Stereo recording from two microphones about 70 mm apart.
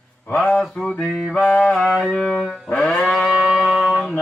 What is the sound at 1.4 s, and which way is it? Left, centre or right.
Mantra, left.